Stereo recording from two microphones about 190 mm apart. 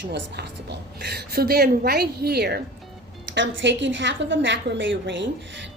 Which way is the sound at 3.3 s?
70° right (ahead or behind).